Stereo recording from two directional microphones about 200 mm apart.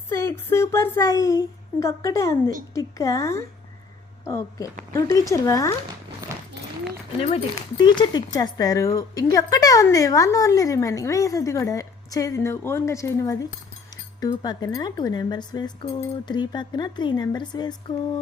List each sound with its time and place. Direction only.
0.1 s a woman's voice: 15° left (ahead or behind)
7.8 s a woman's voice: 20° left (ahead or behind)